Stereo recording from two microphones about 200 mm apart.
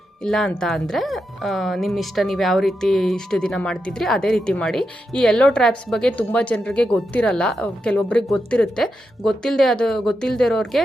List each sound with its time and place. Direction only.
0.2 s speech: 5° left (ahead or behind)